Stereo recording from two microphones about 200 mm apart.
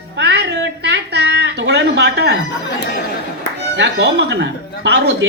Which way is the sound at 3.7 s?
60° right (ahead or behind).